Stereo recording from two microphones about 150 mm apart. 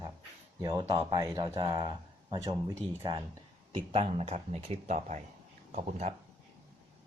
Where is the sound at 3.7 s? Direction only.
40° right (ahead or behind).